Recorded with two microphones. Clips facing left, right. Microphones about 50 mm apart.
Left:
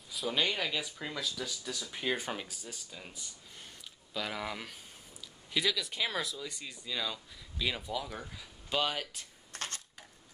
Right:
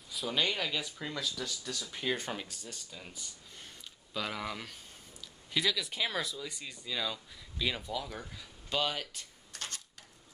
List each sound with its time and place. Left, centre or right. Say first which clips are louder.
0.1 s speech: even; centre
9.5 s coin: left 2 dB; left